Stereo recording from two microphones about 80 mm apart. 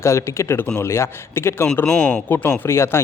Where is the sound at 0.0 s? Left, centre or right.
Left.